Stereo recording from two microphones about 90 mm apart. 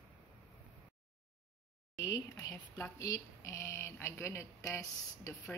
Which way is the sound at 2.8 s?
40° left (ahead or behind).